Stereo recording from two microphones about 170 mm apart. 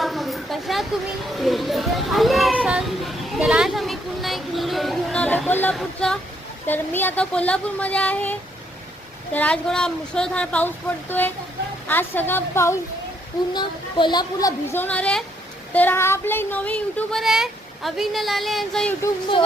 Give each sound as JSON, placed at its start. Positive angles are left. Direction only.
{"t": 0.0, "sound": "a sound", "side_deg": 0}
{"t": 1.3, "sound": "a child's voice", "side_deg": 0}
{"t": 11.9, "sound": "speech", "side_deg": 10}
{"t": 13.5, "sound": "speech", "side_deg": 25}
{"t": 14.7, "sound": "speech", "side_deg": 10}